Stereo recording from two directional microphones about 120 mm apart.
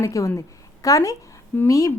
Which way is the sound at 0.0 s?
25° left (ahead or behind).